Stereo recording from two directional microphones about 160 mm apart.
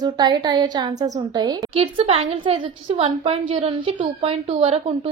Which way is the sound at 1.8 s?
35° right (ahead or behind).